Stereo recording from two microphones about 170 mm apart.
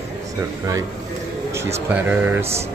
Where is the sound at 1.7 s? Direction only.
10° right (ahead or behind).